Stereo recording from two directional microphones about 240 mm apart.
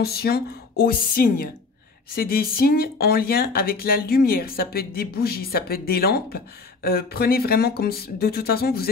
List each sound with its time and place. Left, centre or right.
0.0 s speech: left